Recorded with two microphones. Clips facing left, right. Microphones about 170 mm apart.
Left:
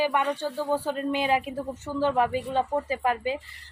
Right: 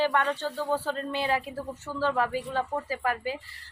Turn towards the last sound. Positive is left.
turn(degrees=20)  # may be behind; listen again after turning